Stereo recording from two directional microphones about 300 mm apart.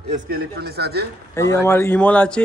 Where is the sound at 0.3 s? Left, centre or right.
Right.